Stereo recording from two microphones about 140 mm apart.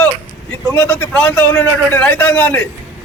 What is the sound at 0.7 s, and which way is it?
A man's voice, 10° left (ahead or behind).